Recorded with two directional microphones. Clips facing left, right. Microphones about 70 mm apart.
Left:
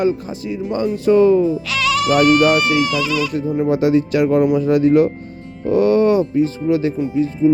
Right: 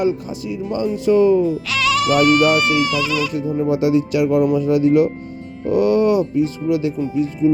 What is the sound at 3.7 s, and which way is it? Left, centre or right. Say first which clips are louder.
Speech: left 1 dB; left.